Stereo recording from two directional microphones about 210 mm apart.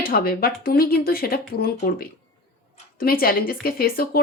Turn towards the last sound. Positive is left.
turn(degrees=45)  # may be behind; listen again after turning